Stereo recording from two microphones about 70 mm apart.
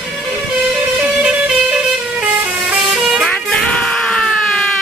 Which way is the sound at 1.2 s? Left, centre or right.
Centre.